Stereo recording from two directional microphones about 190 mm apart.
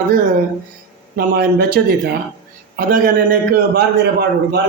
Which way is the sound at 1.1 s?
50° right (ahead or behind).